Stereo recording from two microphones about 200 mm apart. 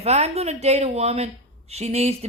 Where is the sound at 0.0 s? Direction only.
30° right (ahead or behind).